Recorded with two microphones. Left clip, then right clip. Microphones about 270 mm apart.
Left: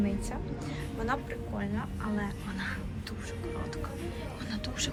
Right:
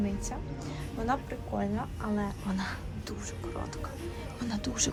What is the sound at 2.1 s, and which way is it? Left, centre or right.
Speech, centre.